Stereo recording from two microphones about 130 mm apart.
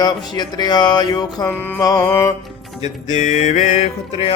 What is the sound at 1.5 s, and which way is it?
Music, 15° left (ahead or behind).